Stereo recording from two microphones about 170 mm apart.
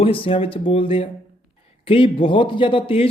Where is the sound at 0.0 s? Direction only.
30° left (ahead or behind).